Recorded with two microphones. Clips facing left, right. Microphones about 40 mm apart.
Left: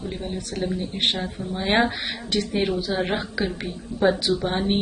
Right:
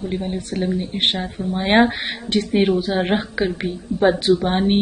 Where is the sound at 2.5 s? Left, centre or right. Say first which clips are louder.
Right 8 dB; right.